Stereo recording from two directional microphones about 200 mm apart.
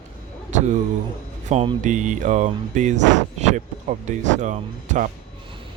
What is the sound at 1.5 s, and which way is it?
Speech, 35° right (ahead or behind).